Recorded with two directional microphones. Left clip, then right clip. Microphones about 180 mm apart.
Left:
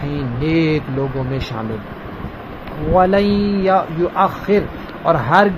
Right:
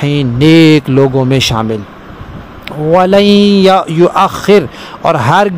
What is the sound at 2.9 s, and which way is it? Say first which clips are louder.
Speech: right 7 dB; 60° right (ahead or behind).